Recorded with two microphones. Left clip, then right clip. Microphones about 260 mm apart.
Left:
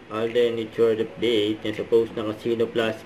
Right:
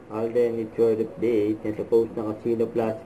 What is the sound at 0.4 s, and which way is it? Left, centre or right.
Speech, centre.